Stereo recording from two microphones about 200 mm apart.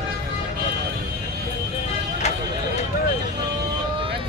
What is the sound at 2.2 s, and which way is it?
Music, 35° left (ahead or behind).